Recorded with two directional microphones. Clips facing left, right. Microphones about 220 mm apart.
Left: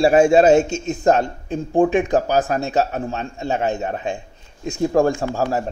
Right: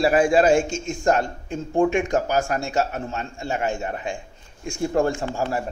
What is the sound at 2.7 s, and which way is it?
Speech, 35° left (ahead or behind).